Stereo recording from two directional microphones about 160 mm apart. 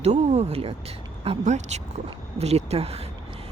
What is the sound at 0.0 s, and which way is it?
Speech, 45° right (ahead or behind).